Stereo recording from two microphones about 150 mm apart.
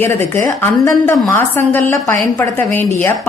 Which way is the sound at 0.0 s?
15° left (ahead or behind).